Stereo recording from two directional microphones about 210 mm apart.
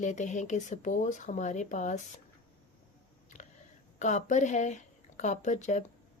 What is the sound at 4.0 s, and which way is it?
A woman's voice, 35° left (ahead or behind).